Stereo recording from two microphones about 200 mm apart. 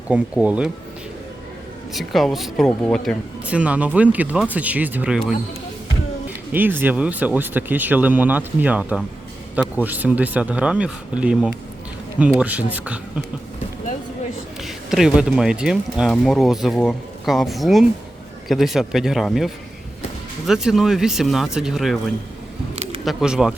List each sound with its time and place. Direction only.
0.1 s speech: 5° right (ahead or behind)
1.9 s speech: centre (ahead or behind)
6.5 s speech: 10° right (ahead or behind)
14.6 s speech: centre (ahead or behind)
20.5 s speech: centre (ahead or behind)
22.7 s a sound: 30° right (ahead or behind)
23.0 s speech: 5° right (ahead or behind)